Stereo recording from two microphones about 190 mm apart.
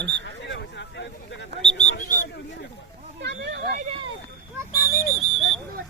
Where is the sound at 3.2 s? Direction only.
60° right (ahead or behind).